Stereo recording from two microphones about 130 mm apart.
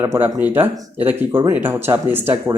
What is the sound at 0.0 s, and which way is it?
Speech, 15° right (ahead or behind).